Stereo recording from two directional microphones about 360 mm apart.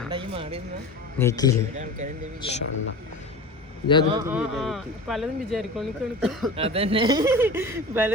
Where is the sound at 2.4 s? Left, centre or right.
Centre.